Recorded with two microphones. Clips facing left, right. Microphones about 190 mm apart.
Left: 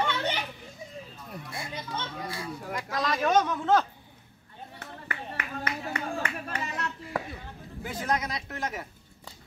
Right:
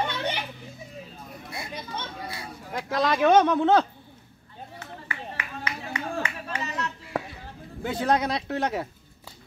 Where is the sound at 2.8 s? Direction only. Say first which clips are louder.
Right 7 dB; 65° right (ahead or behind).